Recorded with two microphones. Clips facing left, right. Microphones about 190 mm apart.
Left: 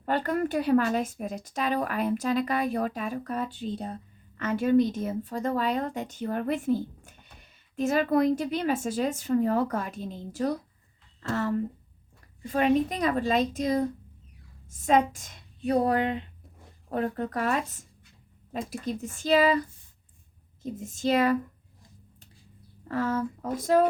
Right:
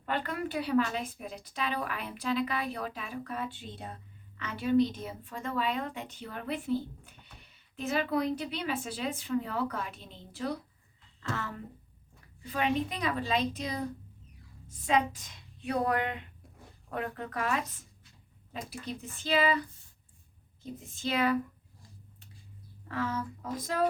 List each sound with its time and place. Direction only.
0.0 s a woman's voice: 40° left (ahead or behind)
18.7 s a woman's voice: 45° left (ahead or behind)
20.9 s a woman's voice: 40° left (ahead or behind)
22.9 s a woman's voice: 45° left (ahead or behind)